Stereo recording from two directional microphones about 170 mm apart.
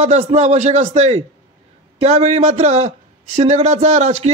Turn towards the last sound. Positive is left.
turn(degrees=-40)  # may be behind; listen again after turning